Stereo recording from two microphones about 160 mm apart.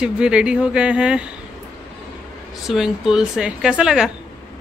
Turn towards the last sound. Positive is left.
turn(degrees=-5)  # may be behind; listen again after turning